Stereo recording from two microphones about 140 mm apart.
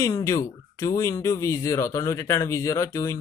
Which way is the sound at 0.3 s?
20° left (ahead or behind).